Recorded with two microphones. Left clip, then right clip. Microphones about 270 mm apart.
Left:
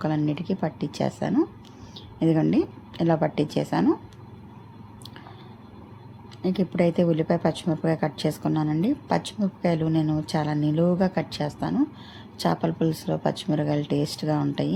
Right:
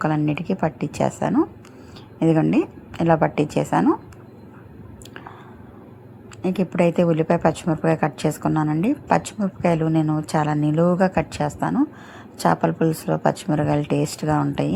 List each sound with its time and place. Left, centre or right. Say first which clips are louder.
0.0 s a woman's voice: right 4 dB; centre
6.4 s a woman's voice: right 4 dB; centre
13.8 s speech: right 4 dB; right
14.2 s a woman's voice: right 4 dB; centre